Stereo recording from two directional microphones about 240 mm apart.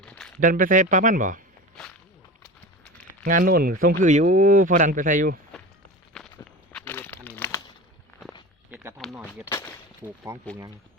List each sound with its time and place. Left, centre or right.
0.3 s speech: right
3.1 s speech: right
6.1 s walk: centre
6.7 s crumpling: centre
8.7 s a sound: centre
9.0 s speech: centre
9.5 s a sound: centre
10.3 s speech: centre